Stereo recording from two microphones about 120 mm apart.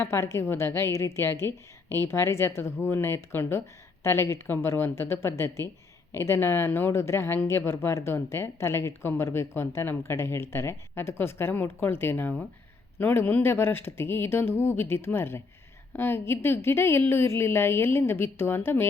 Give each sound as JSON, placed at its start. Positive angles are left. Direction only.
{"t": 0.0, "sound": "speech", "side_deg": 20}